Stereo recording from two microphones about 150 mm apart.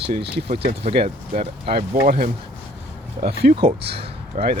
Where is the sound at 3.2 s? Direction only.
90° right.